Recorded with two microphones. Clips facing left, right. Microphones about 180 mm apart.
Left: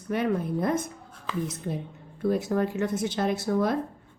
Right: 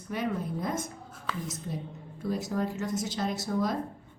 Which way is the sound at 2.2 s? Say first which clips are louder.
Left 6 dB; 60° left (ahead or behind).